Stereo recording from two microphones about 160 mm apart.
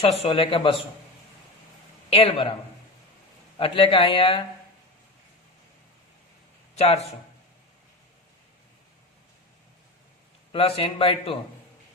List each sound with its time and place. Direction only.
0.0 s speech: 35° left (ahead or behind)
2.0 s speech: 35° left (ahead or behind)
3.6 s speech: 35° left (ahead or behind)
6.7 s a man's voice: 40° left (ahead or behind)
10.5 s speech: 35° left (ahead or behind)